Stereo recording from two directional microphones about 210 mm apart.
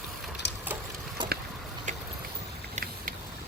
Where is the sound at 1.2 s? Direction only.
20° right (ahead or behind).